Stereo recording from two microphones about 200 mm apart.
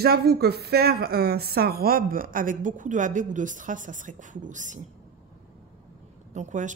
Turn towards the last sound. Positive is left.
turn(degrees=-35)  # may be behind; listen again after turning